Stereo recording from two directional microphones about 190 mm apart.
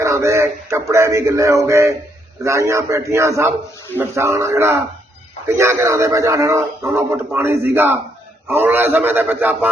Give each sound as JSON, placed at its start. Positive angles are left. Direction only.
{"t": 0.0, "sound": "speech", "side_deg": -15}